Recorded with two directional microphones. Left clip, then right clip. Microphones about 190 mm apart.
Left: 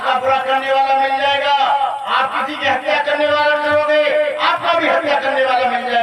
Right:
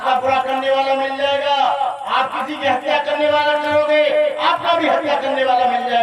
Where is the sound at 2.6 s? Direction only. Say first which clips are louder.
Even; 20° left (ahead or behind).